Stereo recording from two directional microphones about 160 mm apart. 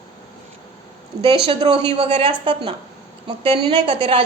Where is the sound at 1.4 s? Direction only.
35° right (ahead or behind).